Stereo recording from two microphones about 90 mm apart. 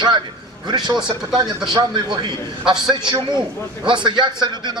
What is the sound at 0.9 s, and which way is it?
Speech, 5° right (ahead or behind).